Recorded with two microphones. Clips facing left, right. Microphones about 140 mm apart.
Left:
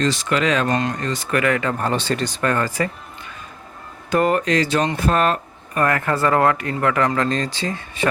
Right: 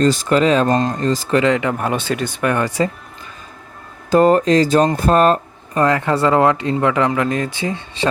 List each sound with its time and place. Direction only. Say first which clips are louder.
0.0 s speech: right 6 dB; 35° right (ahead or behind); by 2.9 s 20° right (ahead or behind)
4.1 s speech: right 6 dB; 35° right (ahead or behind)
5.7 s speech: right 4 dB; 25° right (ahead or behind)